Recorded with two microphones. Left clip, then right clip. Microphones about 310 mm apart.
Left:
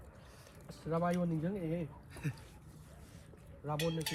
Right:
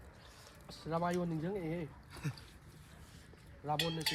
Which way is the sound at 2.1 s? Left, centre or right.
Centre.